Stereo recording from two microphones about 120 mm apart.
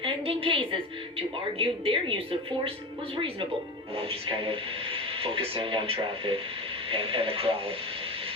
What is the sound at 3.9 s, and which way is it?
Speech, 50° right (ahead or behind).